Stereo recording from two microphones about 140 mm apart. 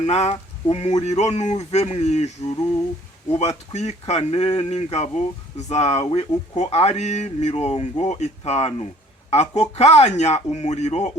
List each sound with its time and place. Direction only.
0.0 s speech: 50° left (ahead or behind)
3.3 s speech: 55° left (ahead or behind)